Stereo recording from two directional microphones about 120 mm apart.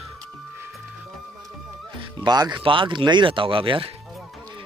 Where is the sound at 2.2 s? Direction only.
35° right (ahead or behind).